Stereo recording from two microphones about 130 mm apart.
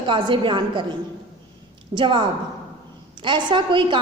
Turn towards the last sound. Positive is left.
turn(degrees=-35)  # may be behind; listen again after turning